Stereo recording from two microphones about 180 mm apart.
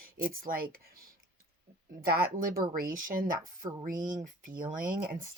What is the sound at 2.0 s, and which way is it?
A woman's voice, 55° right (ahead or behind).